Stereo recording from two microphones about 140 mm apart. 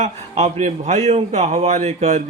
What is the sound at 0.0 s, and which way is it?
A man's voice, 50° right (ahead or behind).